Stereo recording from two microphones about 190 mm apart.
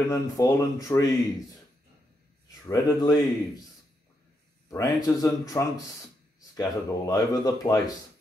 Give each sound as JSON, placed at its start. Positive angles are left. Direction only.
{"t": 0.1, "sound": "speech", "side_deg": 15}
{"t": 2.6, "sound": "speech", "side_deg": 20}
{"t": 4.6, "sound": "speech", "side_deg": 15}